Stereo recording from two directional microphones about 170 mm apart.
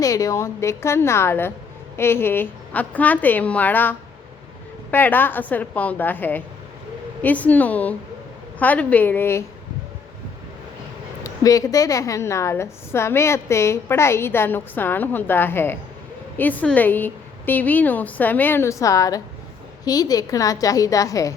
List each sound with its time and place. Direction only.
0.0 s a woman's voice: 20° left (ahead or behind)
11.2 s a woman's voice: 20° left (ahead or behind)